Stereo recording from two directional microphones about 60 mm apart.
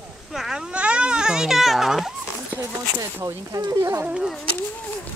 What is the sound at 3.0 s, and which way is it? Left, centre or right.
Speech, right.